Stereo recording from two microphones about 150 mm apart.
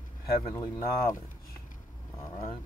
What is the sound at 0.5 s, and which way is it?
Speech, 25° left (ahead or behind).